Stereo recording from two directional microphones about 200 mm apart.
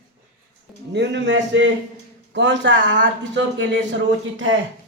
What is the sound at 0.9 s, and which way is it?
Speech, 60° right (ahead or behind).